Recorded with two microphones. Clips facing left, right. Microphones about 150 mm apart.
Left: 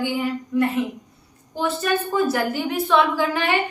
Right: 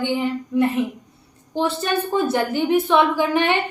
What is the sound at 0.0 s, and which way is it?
A woman's voice, 25° right (ahead or behind).